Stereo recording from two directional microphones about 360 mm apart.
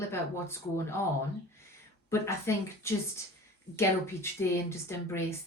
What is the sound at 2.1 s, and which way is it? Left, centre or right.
A woman's voice, centre.